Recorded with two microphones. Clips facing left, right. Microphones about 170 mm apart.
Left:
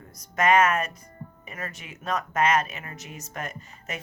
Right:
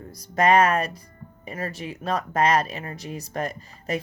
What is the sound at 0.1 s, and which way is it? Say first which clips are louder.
Speech: right 2 dB; 35° right (ahead or behind).